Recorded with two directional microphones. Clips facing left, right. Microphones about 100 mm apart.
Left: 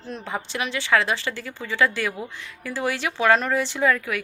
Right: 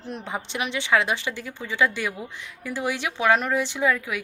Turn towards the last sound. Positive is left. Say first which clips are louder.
# left 2 dB
turn(degrees=-10)  # may be behind; listen again after turning